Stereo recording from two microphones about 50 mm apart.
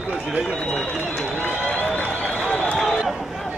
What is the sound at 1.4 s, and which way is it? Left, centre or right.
Run, left.